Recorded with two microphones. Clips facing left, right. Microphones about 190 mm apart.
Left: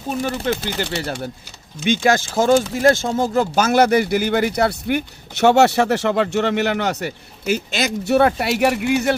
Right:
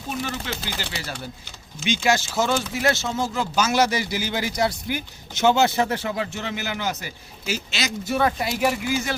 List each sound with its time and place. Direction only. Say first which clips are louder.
0.1 s speech: left 8 dB; 40° left (ahead or behind); by 9.1 s 60° left (ahead or behind)